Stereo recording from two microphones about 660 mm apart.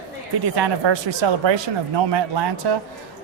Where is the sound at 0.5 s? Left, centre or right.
Right.